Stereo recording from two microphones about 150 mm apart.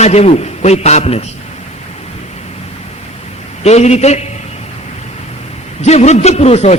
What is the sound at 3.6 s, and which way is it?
Speech, 45° left (ahead or behind).